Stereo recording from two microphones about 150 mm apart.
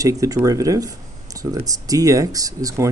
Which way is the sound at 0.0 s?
20° right (ahead or behind).